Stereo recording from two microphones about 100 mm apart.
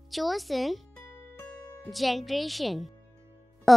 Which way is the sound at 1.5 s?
30° left (ahead or behind).